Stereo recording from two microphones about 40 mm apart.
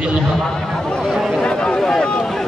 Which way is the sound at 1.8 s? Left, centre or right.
Centre.